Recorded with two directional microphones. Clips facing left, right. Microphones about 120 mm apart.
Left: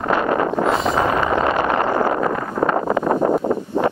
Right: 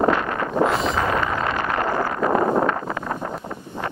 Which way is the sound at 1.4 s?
20° left (ahead or behind).